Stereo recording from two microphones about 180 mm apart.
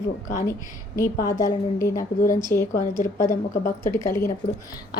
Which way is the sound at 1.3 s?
20° left (ahead or behind).